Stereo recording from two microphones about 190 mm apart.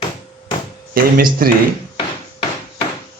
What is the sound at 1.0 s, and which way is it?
Speech, 50° right (ahead or behind).